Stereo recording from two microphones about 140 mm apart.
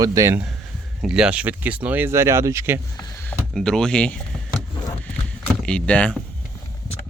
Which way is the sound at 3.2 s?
10° left (ahead or behind).